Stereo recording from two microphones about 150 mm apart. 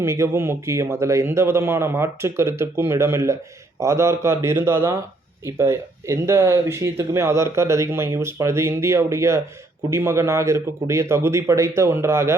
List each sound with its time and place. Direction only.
0.0 s speech: 20° right (ahead or behind)